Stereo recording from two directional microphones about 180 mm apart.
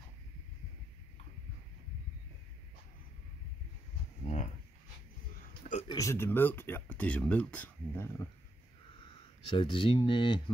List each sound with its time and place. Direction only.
5.6 s a sound: 40° left (ahead or behind)
5.9 s speech: 15° left (ahead or behind)
9.5 s speech: 30° left (ahead or behind)